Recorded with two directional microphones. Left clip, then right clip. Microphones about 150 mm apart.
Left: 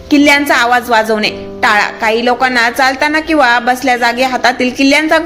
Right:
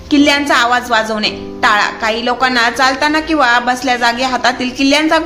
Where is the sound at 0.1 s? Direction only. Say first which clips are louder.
Left 2 dB; 30° left (ahead or behind).